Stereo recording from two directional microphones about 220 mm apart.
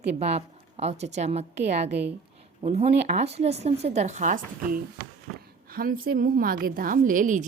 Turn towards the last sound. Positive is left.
turn(degrees=-35)  # may be behind; listen again after turning